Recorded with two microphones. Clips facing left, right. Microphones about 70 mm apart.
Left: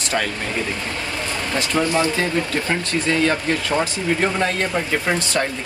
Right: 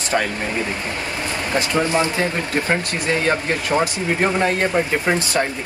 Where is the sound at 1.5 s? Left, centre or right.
Right.